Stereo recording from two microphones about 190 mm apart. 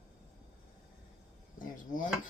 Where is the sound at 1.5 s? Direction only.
45° left (ahead or behind).